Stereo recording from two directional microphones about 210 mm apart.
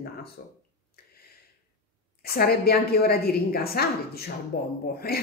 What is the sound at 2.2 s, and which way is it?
A woman's voice, 45° left (ahead or behind).